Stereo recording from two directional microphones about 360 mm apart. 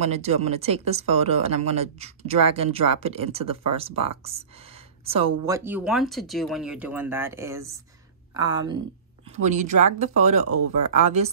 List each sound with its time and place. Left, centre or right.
0.0 s speech: centre